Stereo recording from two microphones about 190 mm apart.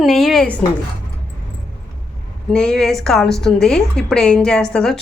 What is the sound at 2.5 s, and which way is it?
A woman's voice, 5° left (ahead or behind).